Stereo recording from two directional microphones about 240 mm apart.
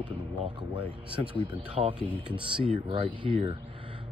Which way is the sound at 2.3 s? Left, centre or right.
Right.